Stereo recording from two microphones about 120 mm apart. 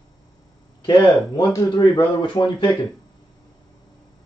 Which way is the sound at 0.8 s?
40° left (ahead or behind).